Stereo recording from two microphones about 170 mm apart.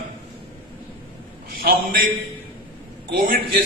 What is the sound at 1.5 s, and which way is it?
Speech, 60° right (ahead or behind).